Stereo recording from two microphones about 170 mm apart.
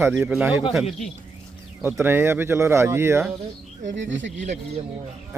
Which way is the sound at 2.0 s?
15° right (ahead or behind).